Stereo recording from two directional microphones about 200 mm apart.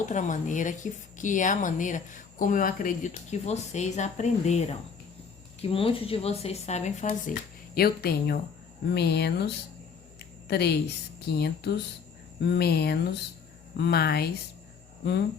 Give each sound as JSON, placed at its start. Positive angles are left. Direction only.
{"t": 0.0, "sound": "a woman's voice", "side_deg": 40}
{"t": 7.8, "sound": "speech", "side_deg": 50}
{"t": 10.5, "sound": "speech", "side_deg": 55}